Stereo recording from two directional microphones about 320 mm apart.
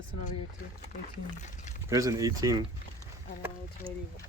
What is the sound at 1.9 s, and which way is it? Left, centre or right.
Speech, centre.